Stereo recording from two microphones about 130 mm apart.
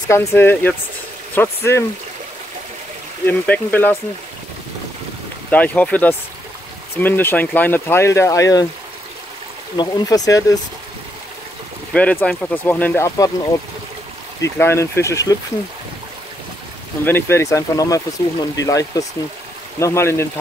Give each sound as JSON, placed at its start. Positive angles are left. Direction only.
{"t": 0.1, "sound": "speech", "side_deg": 20}
{"t": 3.3, "sound": "speech", "side_deg": 15}
{"t": 5.5, "sound": "speech", "side_deg": 10}
{"t": 9.8, "sound": "speech", "side_deg": 30}
{"t": 11.9, "sound": "speech", "side_deg": 10}
{"t": 14.4, "sound": "speech", "side_deg": 20}
{"t": 17.0, "sound": "speech", "side_deg": 20}